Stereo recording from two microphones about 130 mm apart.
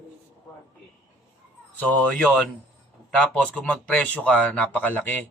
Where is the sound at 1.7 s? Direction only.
10° left (ahead or behind).